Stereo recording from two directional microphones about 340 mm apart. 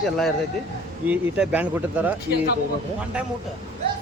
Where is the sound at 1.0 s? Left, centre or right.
Centre.